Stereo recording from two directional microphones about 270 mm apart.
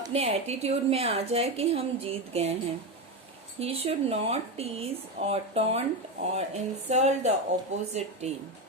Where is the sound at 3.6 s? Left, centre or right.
Right.